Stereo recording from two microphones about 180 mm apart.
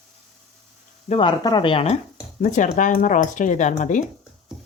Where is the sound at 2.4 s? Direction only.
45° left (ahead or behind).